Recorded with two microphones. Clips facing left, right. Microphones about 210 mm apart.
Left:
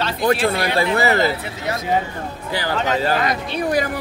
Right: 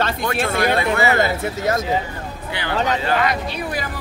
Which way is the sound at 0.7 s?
35° left (ahead or behind).